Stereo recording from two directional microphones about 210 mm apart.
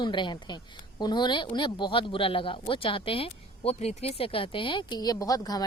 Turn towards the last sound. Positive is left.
turn(degrees=15)  # may be behind; listen again after turning